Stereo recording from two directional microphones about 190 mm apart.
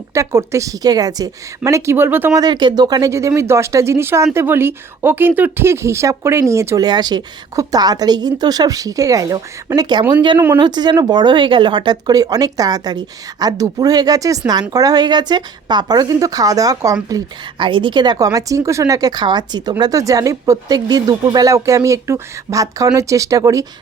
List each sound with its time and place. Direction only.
0.1 s a woman's voice: 15° right (ahead or behind)